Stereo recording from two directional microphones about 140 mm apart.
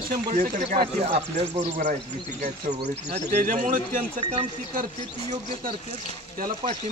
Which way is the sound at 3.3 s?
70° right (ahead or behind).